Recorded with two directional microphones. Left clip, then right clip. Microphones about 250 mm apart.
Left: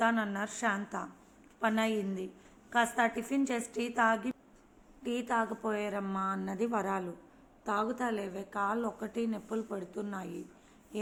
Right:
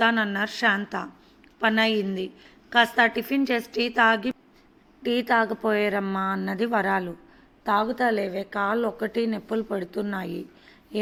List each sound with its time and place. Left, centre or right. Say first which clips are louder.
0.0 s a woman's voice: right 8 dB; right